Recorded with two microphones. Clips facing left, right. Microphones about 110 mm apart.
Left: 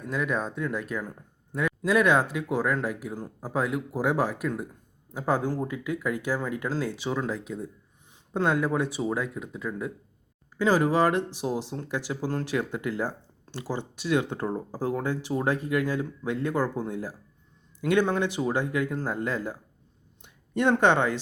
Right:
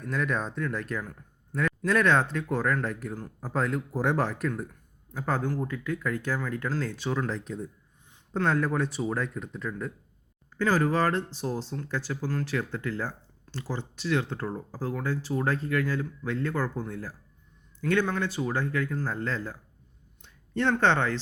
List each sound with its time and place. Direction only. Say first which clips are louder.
0.1 s a man's voice: left 1 dB; 5° left (ahead or behind)